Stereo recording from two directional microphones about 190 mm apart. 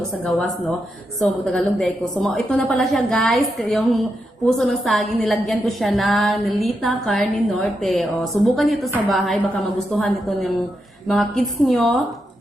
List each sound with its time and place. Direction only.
0.3 s a woman's voice: centre (ahead or behind)